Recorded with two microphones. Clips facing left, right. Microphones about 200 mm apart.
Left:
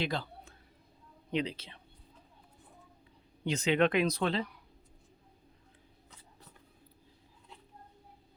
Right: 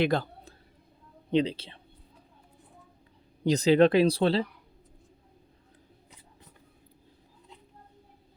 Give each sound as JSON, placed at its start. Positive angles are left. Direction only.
{"t": 0.0, "sound": "a man's voice", "side_deg": -50}
{"t": 1.3, "sound": "speech", "side_deg": -30}
{"t": 3.4, "sound": "speech", "side_deg": -35}